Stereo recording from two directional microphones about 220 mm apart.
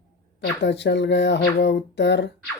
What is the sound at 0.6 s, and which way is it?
Speech, 50° left (ahead or behind).